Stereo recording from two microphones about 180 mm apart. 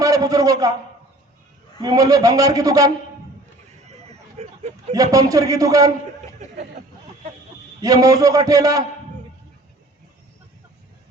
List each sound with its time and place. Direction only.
0.0 s a man's voice: 20° right (ahead or behind)
1.8 s a man's voice: 20° right (ahead or behind)
4.4 s a sound: 40° right (ahead or behind)
5.1 s a man's voice: 20° right (ahead or behind)
7.8 s a man's voice: 20° right (ahead or behind)